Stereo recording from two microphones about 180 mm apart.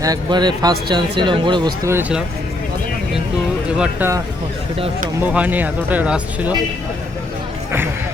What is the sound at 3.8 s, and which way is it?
Speech, 10° right (ahead or behind).